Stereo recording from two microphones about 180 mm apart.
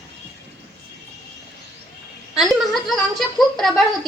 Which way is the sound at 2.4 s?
Centre (ahead or behind).